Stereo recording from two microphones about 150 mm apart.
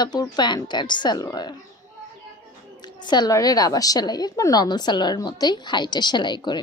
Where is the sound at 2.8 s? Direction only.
30° left (ahead or behind).